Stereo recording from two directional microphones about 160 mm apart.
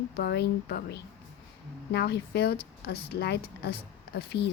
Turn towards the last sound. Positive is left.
turn(degrees=85)